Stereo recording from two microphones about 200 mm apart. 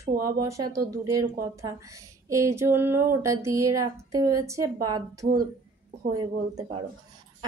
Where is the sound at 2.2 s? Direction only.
15° right (ahead or behind).